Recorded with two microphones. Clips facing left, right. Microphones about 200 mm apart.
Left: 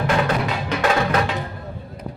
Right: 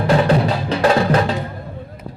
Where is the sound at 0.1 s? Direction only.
30° right (ahead or behind).